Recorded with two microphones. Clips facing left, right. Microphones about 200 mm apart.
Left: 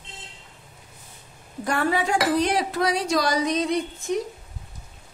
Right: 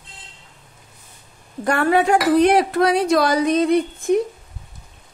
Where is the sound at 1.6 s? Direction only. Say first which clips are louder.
Right 6 dB; 60° right (ahead or behind).